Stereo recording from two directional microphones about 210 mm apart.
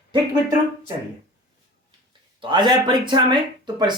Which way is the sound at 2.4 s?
20° right (ahead or behind).